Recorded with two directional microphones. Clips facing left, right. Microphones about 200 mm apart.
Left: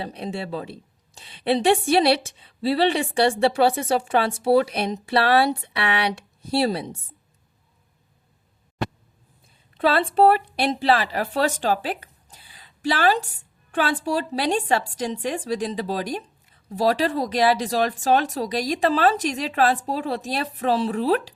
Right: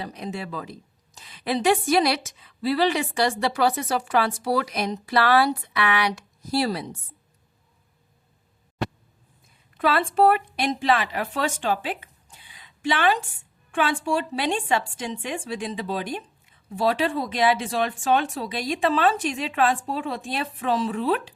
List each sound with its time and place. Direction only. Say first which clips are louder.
0.0 s a woman's voice: left 2 dB; 30° left (ahead or behind)
9.7 s a woman's voice: left 2 dB; 30° left (ahead or behind)